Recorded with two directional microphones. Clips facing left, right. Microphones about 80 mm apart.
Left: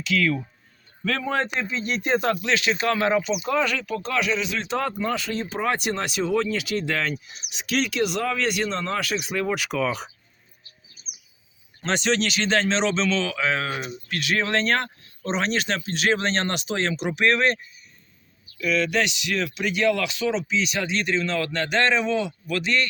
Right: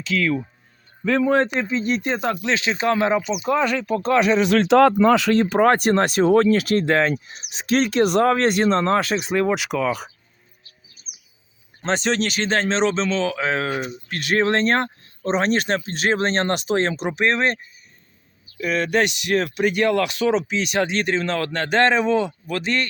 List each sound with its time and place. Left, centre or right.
0.0 s speech: right
4.4 s speech: right; by 10.1 s centre
11.8 s speech: right
13.3 s speech: right
17.1 s speech: right
18.6 s speech: right